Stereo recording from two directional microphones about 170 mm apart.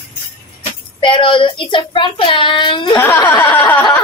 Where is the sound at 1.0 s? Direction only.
30° left (ahead or behind).